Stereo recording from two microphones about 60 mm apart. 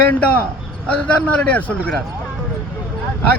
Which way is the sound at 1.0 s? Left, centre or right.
Centre.